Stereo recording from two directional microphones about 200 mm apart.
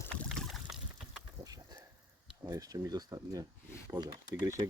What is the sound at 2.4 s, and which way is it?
Speech, 15° right (ahead or behind).